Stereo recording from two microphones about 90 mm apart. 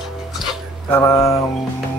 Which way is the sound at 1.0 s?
30° left (ahead or behind).